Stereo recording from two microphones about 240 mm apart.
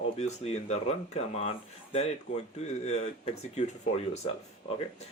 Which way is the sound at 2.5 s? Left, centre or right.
Left.